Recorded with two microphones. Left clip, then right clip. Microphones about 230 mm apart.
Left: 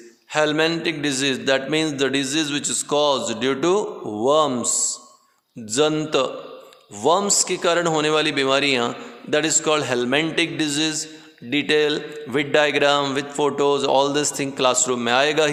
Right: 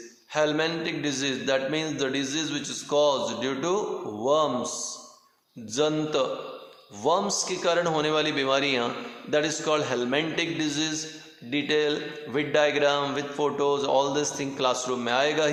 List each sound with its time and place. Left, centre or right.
0.3 s a man's voice: left
5.7 s a man's voice: left